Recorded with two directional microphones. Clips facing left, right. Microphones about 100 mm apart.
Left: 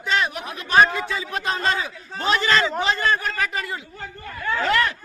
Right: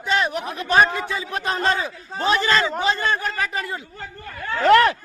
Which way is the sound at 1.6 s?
35° right (ahead or behind).